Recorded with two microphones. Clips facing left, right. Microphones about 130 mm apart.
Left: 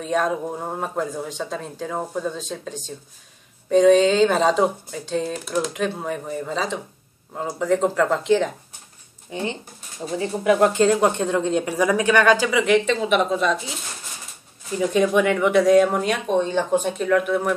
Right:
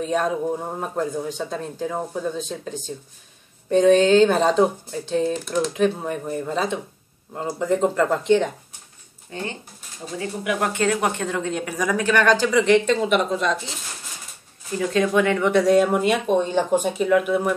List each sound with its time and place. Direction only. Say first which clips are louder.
0.0 s speech: even; centre (ahead or behind)
9.3 s speech: left 3 dB; 20° left (ahead or behind)
10.1 s a woman's voice: left 6 dB; 30° left (ahead or behind); by 13.6 s 5° left (ahead or behind)
14.8 s speech: left 1 dB; 15° left (ahead or behind); by 17.6 s 5° right (ahead or behind)